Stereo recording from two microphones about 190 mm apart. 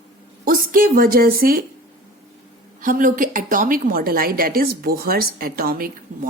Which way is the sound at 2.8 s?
45° right (ahead or behind).